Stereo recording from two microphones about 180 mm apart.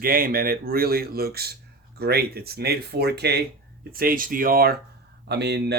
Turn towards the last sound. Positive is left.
turn(degrees=-70)  # may be behind; listen again after turning